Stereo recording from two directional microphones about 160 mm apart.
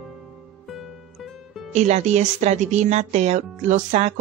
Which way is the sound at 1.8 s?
45° right (ahead or behind).